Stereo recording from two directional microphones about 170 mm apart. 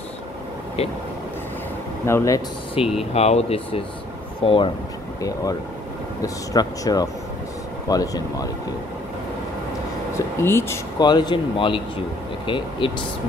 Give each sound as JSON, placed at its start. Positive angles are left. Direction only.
{"t": 0.8, "sound": "speech", "side_deg": 35}
{"t": 2.0, "sound": "speech", "side_deg": 15}
{"t": 2.8, "sound": "speech", "side_deg": 35}
{"t": 10.1, "sound": "speech", "side_deg": 15}